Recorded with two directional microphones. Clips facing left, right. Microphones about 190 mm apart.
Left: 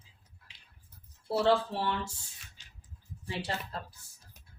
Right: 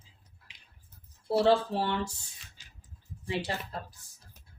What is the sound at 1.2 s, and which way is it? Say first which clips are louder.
Speech: right 3 dB; 20° right (ahead or behind).